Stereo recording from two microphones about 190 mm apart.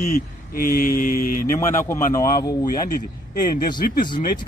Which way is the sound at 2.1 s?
20° left (ahead or behind).